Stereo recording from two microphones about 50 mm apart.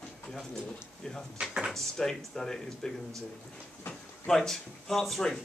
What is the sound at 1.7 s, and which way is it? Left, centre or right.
Speech, centre.